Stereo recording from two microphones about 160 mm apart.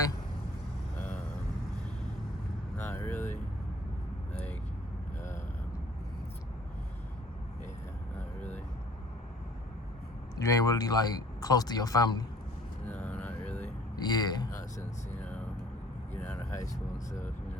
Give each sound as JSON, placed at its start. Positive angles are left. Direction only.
{"t": 0.9, "sound": "vehicle", "side_deg": 10}
{"t": 2.7, "sound": "vehicle", "side_deg": 15}
{"t": 8.4, "sound": "vehicle", "side_deg": 10}
{"t": 10.3, "sound": "speech", "side_deg": 20}
{"t": 12.8, "sound": "music", "side_deg": 10}
{"t": 13.9, "sound": "vehicle", "side_deg": 25}
{"t": 17.1, "sound": "speech", "side_deg": 50}